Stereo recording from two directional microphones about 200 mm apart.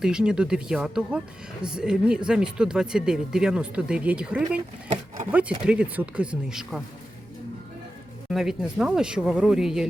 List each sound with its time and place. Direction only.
0.0 s speech: 5° right (ahead or behind)
4.9 s speech: 35° right (ahead or behind)
5.3 s speech: 5° right (ahead or behind)
8.3 s speech: centre (ahead or behind)